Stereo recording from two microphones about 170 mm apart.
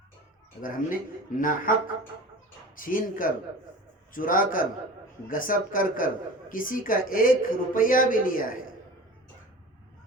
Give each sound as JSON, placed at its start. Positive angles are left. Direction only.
{"t": 0.6, "sound": "a woman's voice", "side_deg": 50}
{"t": 2.7, "sound": "a woman's voice", "side_deg": 55}